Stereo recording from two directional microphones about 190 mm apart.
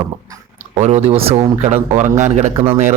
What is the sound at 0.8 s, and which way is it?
A man's voice, 35° right (ahead or behind).